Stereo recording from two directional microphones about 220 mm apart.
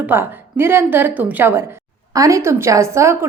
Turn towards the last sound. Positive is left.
turn(degrees=-15)  # may be behind; listen again after turning